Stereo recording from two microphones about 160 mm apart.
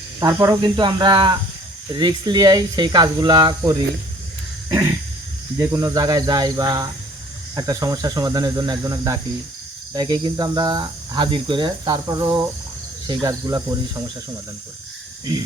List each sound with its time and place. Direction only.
0.2 s speech: 20° right (ahead or behind)
4.7 s speech: 20° right (ahead or behind)